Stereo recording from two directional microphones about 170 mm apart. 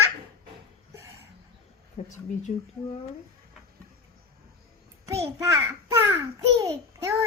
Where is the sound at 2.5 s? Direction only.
45° left (ahead or behind).